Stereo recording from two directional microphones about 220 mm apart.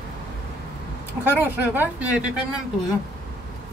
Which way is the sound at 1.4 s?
10° right (ahead or behind).